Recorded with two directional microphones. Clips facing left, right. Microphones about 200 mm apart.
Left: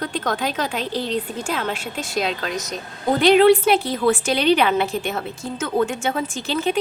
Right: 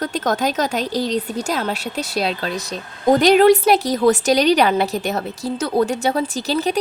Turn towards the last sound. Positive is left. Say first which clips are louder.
# right 2 dB
turn(degrees=-40)  # may be behind; listen again after turning